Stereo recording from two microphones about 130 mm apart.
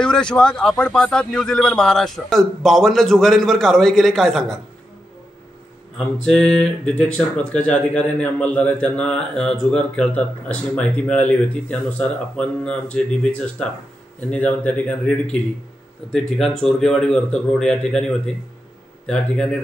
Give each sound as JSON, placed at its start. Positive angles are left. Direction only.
{"t": 0.0, "sound": "a man's voice", "side_deg": 5}
{"t": 6.3, "sound": "speech", "side_deg": 5}
{"t": 16.3, "sound": "a man's voice", "side_deg": 5}